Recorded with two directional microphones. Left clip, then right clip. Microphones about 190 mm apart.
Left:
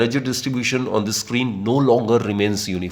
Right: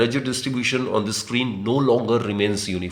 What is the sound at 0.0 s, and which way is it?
Speech, 30° left (ahead or behind).